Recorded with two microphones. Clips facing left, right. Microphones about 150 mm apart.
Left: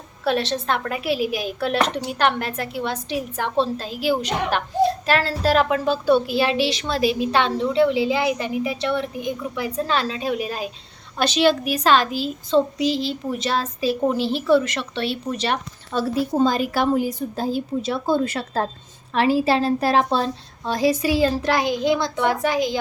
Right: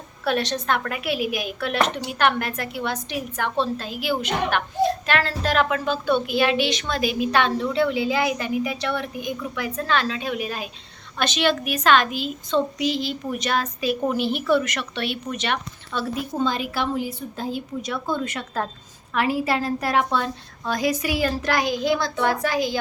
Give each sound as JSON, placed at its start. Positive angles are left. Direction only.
{"t": 0.3, "sound": "a woman's voice", "side_deg": 30}